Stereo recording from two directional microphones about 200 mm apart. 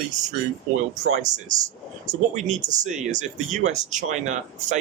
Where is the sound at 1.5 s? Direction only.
35° right (ahead or behind).